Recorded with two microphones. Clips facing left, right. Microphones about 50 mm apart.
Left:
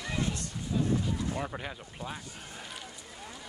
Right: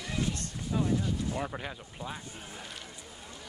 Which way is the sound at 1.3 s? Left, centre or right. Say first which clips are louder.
Even; centre.